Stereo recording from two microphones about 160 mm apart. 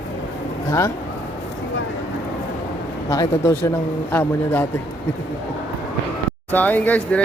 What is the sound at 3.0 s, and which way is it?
Speech, 20° left (ahead or behind).